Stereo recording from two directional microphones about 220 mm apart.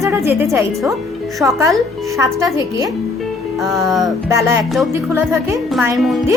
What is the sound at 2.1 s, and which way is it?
Speech, 15° right (ahead or behind).